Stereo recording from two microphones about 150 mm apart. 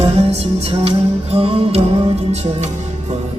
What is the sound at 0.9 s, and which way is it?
Music, 40° right (ahead or behind).